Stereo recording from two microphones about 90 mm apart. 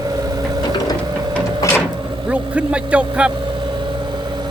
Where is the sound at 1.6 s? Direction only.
35° left (ahead or behind).